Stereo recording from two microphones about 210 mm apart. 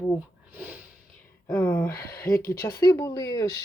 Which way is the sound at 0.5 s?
10° right (ahead or behind).